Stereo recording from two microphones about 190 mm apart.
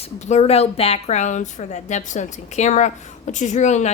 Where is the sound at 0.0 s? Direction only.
35° left (ahead or behind).